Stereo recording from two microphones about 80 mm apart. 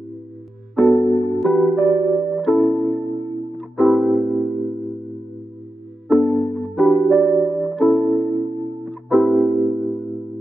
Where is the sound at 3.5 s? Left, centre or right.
Centre.